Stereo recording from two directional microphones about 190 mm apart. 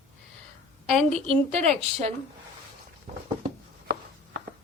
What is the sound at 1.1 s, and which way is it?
A woman's voice, 35° right (ahead or behind).